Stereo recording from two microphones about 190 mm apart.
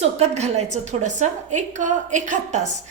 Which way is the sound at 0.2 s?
35° right (ahead or behind).